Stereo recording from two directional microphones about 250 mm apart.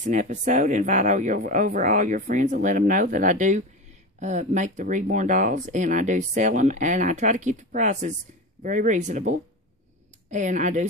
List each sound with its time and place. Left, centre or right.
0.0 s speech: right